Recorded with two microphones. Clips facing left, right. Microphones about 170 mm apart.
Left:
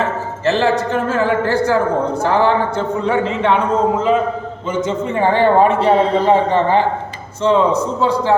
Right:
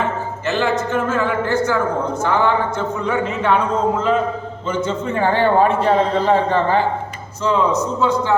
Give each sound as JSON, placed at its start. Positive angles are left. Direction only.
{"t": 0.4, "sound": "a man's voice", "side_deg": 35}
{"t": 4.7, "sound": "a man's voice", "side_deg": 15}
{"t": 7.4, "sound": "a man's voice", "side_deg": 30}